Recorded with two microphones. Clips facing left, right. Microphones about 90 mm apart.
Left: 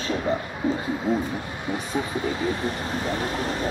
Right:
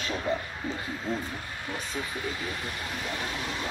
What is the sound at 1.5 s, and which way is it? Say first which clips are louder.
Speech: left 8 dB; 20° left (ahead or behind).